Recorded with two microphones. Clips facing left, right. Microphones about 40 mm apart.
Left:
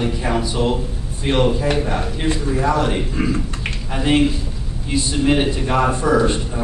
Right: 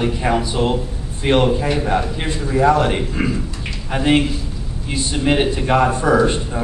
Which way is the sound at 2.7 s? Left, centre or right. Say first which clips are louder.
Right 2 dB; right.